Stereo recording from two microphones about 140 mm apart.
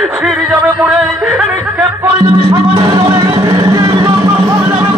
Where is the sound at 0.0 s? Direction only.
Centre (ahead or behind).